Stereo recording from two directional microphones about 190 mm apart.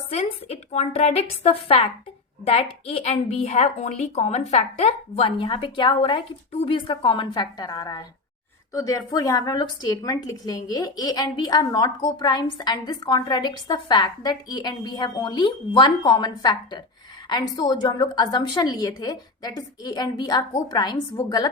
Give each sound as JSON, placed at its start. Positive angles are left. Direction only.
{"t": 0.1, "sound": "a woman's voice", "side_deg": 35}